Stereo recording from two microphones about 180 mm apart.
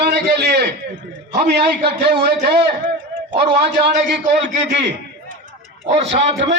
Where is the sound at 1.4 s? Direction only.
65° right (ahead or behind).